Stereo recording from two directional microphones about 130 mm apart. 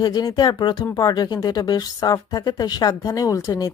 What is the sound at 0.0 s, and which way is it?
Speech, 30° left (ahead or behind).